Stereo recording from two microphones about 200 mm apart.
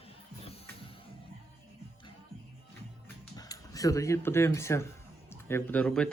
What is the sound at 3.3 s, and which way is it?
A man's voice, 20° left (ahead or behind).